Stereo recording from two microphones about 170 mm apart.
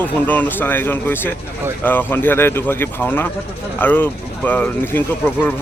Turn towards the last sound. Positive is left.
turn(degrees=10)  # may be behind; listen again after turning